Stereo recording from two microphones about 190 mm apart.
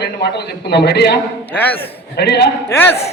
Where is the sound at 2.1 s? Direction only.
60° left (ahead or behind).